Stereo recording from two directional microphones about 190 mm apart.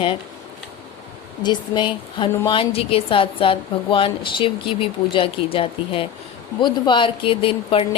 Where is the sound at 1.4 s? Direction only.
25° left (ahead or behind).